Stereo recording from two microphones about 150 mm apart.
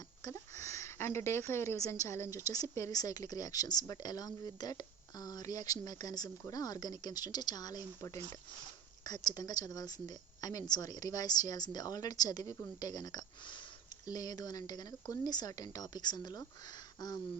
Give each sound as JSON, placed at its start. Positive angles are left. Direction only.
{"t": 0.3, "sound": "a woman's voice", "side_deg": 20}
{"t": 9.0, "sound": "a woman's voice", "side_deg": 25}